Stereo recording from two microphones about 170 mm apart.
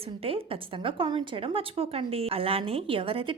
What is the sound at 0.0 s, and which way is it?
A woman's voice, 35° right (ahead or behind).